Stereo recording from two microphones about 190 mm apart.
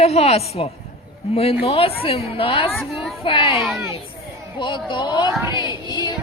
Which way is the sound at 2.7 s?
Centre (ahead or behind).